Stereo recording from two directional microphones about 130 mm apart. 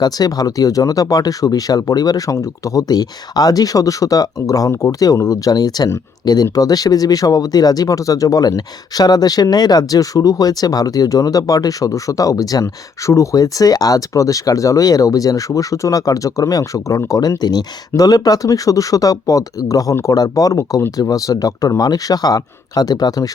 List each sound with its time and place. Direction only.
0.0 s speech: 30° left (ahead or behind)